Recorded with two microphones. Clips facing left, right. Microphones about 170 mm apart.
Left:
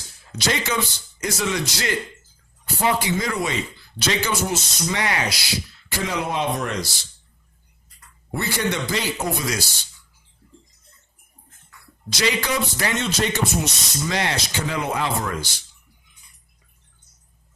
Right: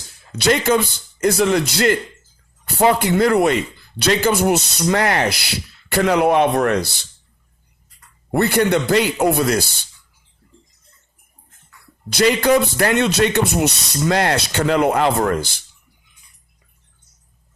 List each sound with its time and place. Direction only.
0.3 s a man's voice: 60° right (ahead or behind)
8.3 s a man's voice: 60° right (ahead or behind)
12.1 s a man's voice: 50° right (ahead or behind)